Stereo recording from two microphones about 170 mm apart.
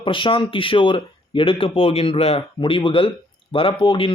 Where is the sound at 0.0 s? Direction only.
30° left (ahead or behind).